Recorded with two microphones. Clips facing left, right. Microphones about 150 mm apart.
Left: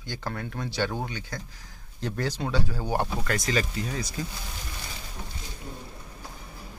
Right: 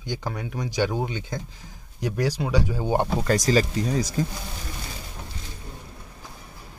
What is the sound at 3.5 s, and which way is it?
Speech, 35° right (ahead or behind).